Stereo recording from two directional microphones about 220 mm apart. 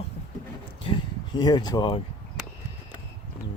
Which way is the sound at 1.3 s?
20° left (ahead or behind).